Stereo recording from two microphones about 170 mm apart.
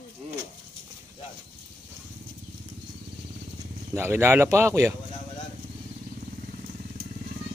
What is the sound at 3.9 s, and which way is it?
Speech, 15° right (ahead or behind).